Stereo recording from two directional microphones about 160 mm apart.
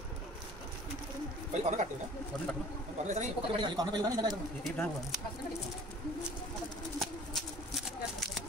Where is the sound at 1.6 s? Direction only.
50° right (ahead or behind).